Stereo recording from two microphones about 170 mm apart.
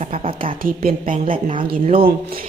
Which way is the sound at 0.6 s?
55° right (ahead or behind).